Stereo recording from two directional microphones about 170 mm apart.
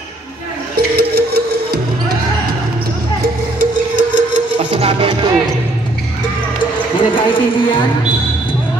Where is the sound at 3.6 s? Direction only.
50° right (ahead or behind).